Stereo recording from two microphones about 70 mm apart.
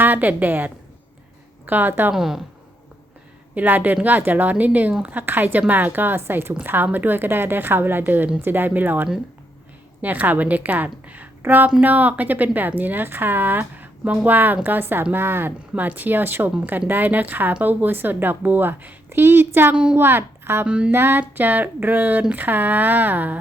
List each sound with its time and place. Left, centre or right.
0.0 s a woman's voice: right
2.1 s a woman's voice: centre
3.5 s a woman's voice: right
15.7 s a woman's voice: right
19.7 s a woman's voice: centre
20.0 s a woman's voice: right
20.7 s a woman's voice: centre
20.9 s a woman's voice: right